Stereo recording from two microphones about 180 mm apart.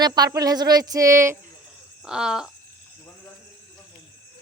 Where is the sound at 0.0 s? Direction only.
25° right (ahead or behind).